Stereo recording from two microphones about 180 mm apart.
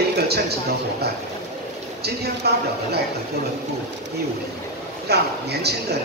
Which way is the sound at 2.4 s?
65° right (ahead or behind).